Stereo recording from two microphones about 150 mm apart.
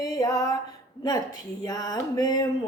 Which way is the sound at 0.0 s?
20° left (ahead or behind).